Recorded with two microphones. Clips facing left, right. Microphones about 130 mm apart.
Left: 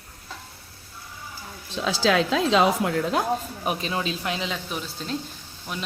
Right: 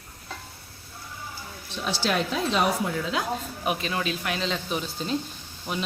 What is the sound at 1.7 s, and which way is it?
Speech, 90° left.